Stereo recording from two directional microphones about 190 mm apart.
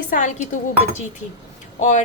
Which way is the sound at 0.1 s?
45° left (ahead or behind).